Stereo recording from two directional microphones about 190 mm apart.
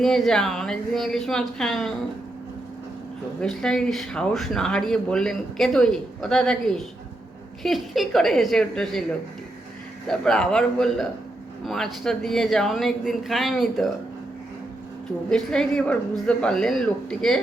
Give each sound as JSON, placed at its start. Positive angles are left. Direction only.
{"t": 0.0, "sound": "speech", "side_deg": 5}
{"t": 3.4, "sound": "speech", "side_deg": 5}
{"t": 10.1, "sound": "speech", "side_deg": 5}
{"t": 15.3, "sound": "speech", "side_deg": 5}